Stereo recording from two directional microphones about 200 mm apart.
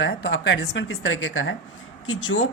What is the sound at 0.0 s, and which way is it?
Speech, 60° left (ahead or behind).